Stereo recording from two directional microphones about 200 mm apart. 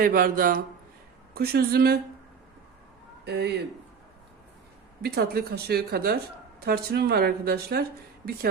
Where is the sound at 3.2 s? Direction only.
55° right (ahead or behind).